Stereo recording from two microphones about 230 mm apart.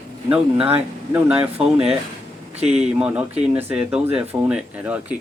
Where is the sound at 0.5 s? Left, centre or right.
Right.